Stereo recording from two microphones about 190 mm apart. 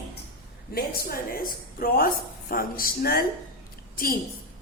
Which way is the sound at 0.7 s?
55° left (ahead or behind).